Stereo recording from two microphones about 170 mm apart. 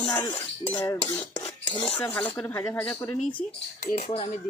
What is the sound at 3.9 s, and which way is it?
Speech, 40° left (ahead or behind).